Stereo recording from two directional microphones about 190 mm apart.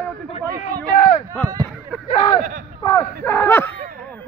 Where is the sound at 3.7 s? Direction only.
45° right (ahead or behind).